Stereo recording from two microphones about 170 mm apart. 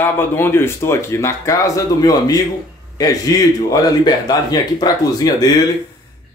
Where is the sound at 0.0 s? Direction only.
15° left (ahead or behind).